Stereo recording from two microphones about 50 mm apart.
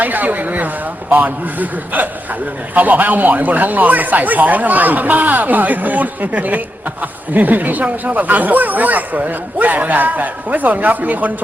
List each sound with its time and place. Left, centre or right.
0.0 s speech: right